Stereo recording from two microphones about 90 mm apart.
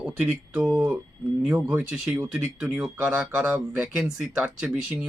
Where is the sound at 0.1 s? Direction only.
20° right (ahead or behind).